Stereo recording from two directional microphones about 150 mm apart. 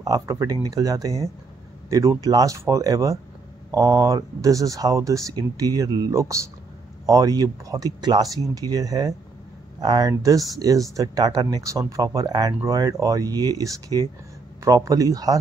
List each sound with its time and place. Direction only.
0.0 s speech: 20° right (ahead or behind)